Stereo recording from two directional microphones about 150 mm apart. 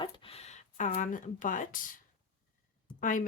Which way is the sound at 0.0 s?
40° left (ahead or behind).